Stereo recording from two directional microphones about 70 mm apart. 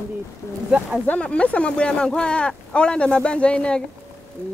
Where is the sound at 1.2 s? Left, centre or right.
Centre.